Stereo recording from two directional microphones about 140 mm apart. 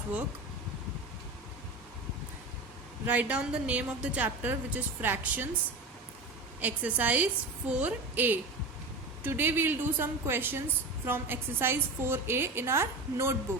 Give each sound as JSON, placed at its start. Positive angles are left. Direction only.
{"t": 3.1, "sound": "a woman's voice", "side_deg": -10}
{"t": 6.6, "sound": "a woman's voice", "side_deg": -10}